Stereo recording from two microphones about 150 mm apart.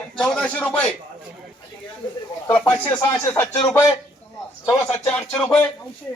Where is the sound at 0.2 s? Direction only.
5° left (ahead or behind).